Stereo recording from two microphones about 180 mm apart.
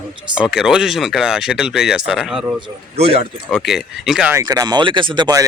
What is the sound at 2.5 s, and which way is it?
Speech, 35° right (ahead or behind).